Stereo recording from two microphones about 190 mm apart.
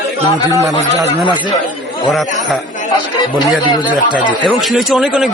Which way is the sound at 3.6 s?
25° left (ahead or behind).